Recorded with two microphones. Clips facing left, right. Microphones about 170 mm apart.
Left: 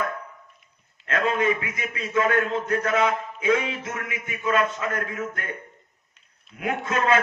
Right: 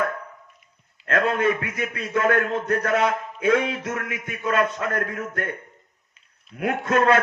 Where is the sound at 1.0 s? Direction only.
60° right (ahead or behind).